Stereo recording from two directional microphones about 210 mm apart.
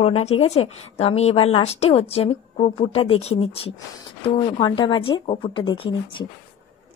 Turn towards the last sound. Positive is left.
turn(degrees=25)  # may be behind; listen again after turning